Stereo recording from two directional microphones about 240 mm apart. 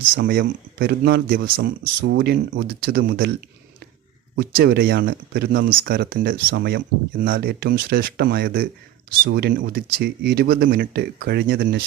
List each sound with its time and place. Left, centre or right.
0.1 s speech: right
4.4 s speech: right